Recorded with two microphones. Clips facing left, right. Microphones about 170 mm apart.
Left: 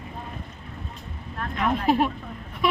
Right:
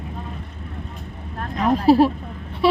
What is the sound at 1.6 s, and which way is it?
Vehicle, 35° right (ahead or behind).